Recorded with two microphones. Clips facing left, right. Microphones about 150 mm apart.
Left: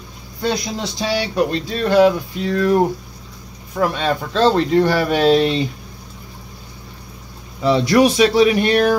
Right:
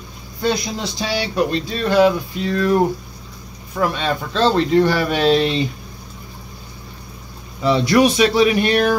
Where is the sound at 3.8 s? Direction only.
45° left (ahead or behind).